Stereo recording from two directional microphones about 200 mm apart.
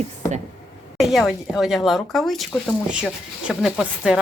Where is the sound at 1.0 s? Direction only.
Centre (ahead or behind).